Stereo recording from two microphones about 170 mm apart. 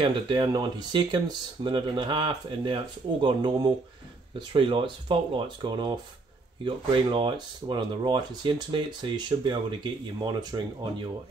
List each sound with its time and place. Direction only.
0.0 s speech: 25° right (ahead or behind)